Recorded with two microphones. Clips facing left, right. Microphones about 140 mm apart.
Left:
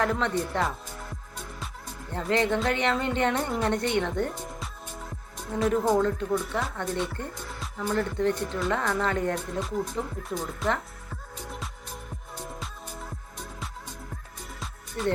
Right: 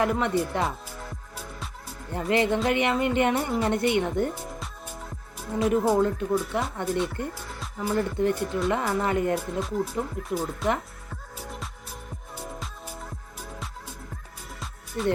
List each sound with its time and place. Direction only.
0.0 s speech: 10° right (ahead or behind)
2.2 s speech: 10° right (ahead or behind)
5.5 s speech: 5° right (ahead or behind)
11.1 s music: centre (ahead or behind)
14.6 s music: centre (ahead or behind)